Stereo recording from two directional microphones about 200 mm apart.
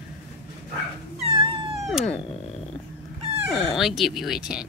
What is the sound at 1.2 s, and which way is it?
Cat, 25° right (ahead or behind).